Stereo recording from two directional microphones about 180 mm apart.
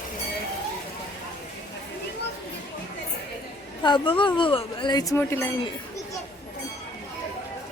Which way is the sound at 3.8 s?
25° left (ahead or behind).